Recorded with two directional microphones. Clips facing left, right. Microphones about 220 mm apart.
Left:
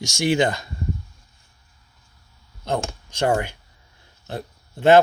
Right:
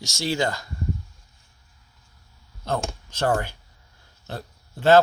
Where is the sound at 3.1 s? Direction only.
15° left (ahead or behind).